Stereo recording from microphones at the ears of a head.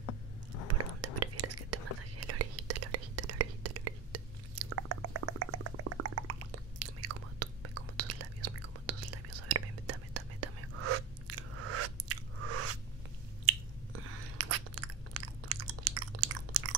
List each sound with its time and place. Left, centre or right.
0.0 s a sound: left
1.0 s whispering: right
13.5 s biting: right